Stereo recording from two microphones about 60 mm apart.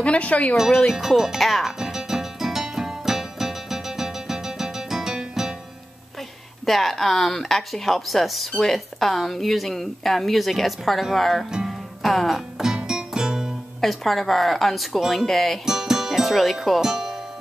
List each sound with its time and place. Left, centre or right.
0.0 s speech: left
0.8 s music: centre
6.6 s speech: centre
11.5 s music: centre
13.7 s speech: centre
15.6 s speech: centre